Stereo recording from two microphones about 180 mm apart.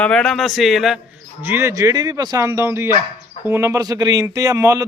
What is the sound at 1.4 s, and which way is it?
Speech, 15° right (ahead or behind).